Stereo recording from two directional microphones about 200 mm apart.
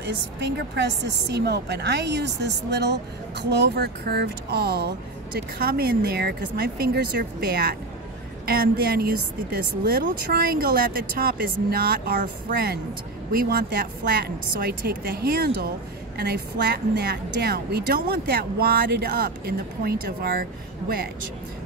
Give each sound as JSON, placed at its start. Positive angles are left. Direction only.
{"t": 0.0, "sound": "a woman's voice", "side_deg": -60}